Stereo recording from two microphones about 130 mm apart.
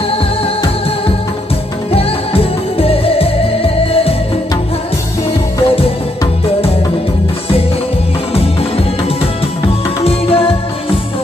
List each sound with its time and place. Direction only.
1.9 s music: 50° left (ahead or behind)
5.7 s music: 45° left (ahead or behind)
10.0 s music: 45° left (ahead or behind)